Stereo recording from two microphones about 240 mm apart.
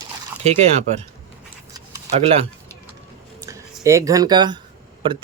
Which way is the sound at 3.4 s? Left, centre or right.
Centre.